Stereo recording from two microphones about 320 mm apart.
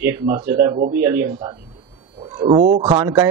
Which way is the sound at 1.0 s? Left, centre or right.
Centre.